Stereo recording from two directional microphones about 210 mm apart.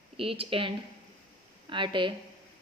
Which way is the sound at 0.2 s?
25° right (ahead or behind).